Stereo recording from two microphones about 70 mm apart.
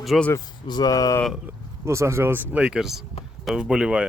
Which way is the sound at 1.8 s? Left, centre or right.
Right.